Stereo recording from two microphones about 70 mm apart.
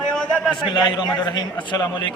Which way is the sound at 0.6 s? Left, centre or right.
Left.